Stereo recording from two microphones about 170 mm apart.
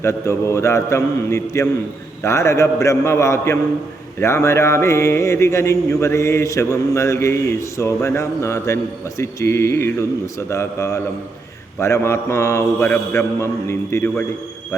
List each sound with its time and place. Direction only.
0.0 s speech: 15° left (ahead or behind)